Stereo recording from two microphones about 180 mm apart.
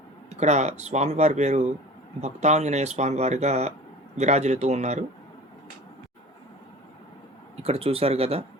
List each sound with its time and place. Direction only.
0.3 s speech: 40° right (ahead or behind)
7.5 s speech: 35° right (ahead or behind)